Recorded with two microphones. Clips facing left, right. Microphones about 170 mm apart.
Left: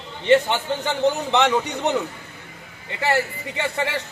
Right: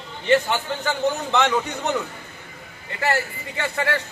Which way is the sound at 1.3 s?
20° left (ahead or behind).